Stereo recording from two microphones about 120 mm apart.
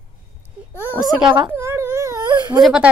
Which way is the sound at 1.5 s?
20° right (ahead or behind).